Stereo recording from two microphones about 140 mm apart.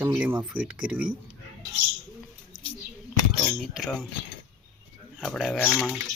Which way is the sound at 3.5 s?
5° right (ahead or behind).